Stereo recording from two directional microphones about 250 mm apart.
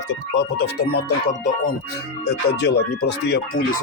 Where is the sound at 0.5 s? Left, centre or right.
Left.